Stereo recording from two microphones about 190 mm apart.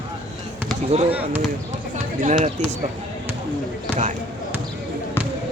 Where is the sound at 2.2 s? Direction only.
35° right (ahead or behind).